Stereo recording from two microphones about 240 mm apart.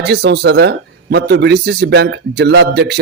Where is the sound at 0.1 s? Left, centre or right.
Right.